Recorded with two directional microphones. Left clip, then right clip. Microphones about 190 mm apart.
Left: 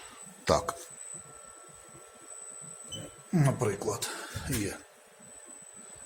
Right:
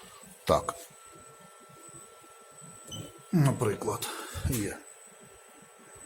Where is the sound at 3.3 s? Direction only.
5° right (ahead or behind).